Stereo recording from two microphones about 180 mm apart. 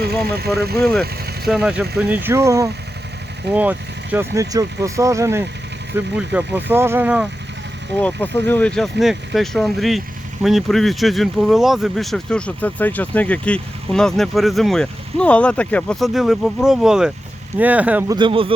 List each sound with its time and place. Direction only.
0.8 s speech: 5° left (ahead or behind)
8.0 s speech: 10° left (ahead or behind); by 18.0 s 10° right (ahead or behind)
18.1 s speech: 25° right (ahead or behind)